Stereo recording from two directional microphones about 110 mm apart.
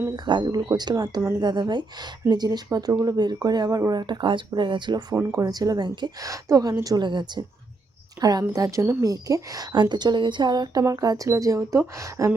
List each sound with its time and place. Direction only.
0.3 s speech: 45° right (ahead or behind)
5.1 s a woman's voice: 30° right (ahead or behind)